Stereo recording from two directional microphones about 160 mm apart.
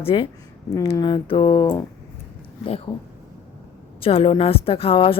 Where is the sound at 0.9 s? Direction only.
30° left (ahead or behind).